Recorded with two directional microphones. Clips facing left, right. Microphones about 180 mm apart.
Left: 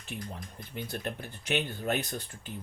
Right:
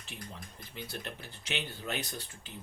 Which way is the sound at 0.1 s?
55° left (ahead or behind).